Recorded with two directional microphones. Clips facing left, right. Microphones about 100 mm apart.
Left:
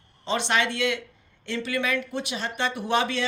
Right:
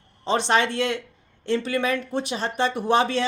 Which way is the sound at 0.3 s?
35° right (ahead or behind).